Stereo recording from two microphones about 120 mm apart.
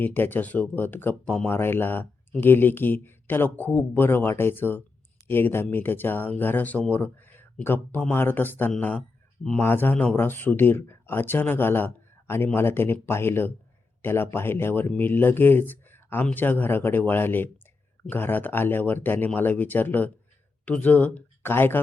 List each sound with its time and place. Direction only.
0.0 s speech: 15° left (ahead or behind)
9.0 s a sound: 5° left (ahead or behind)
9.6 s speech: 15° left (ahead or behind)